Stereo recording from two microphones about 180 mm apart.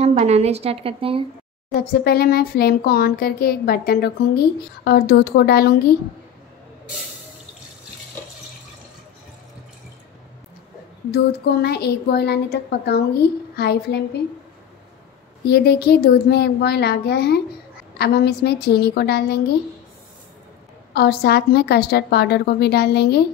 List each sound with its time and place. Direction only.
0.1 s a woman's voice: 40° right (ahead or behind)
1.8 s a woman's voice: 60° left (ahead or behind)
11.1 s a woman's voice: 65° left (ahead or behind)
15.4 s a woman's voice: 60° left (ahead or behind)
20.9 s a woman's voice: 65° left (ahead or behind)